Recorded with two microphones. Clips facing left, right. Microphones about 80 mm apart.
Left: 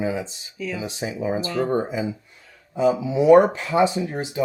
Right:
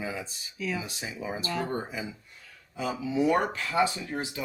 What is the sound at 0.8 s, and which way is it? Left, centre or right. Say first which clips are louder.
Speech: left 9 dB; left.